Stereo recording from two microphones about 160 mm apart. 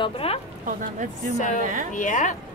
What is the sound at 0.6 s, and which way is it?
Speech, 55° right (ahead or behind).